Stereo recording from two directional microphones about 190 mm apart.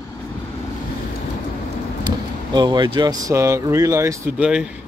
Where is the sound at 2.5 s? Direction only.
20° right (ahead or behind); by 4.7 s 5° right (ahead or behind).